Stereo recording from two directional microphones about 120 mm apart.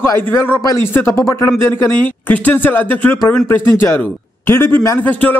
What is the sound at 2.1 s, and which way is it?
A man's voice, 15° left (ahead or behind).